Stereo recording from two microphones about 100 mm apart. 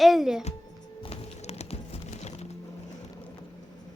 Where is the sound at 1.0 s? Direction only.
90° left.